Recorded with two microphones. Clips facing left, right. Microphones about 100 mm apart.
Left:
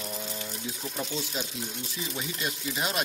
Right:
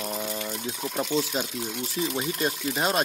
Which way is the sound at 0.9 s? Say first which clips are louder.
Right 8 dB; 50° right (ahead or behind).